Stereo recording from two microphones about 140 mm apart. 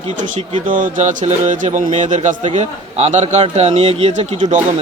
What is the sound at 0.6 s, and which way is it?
Speech, 70° right (ahead or behind).